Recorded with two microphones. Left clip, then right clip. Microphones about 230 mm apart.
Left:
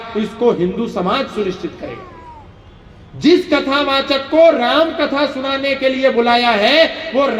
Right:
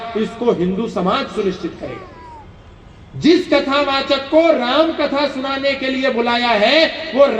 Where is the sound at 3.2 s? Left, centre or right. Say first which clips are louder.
Left 1 dB; left.